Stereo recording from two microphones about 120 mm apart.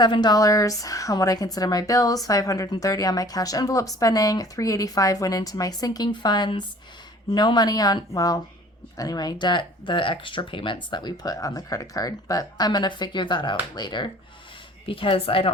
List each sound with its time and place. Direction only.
0.0 s a woman's voice: 35° left (ahead or behind)